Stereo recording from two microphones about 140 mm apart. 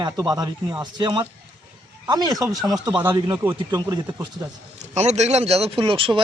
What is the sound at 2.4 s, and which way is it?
Speech, centre (ahead or behind).